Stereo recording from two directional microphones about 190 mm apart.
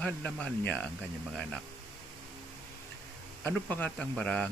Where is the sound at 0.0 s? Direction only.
5° left (ahead or behind).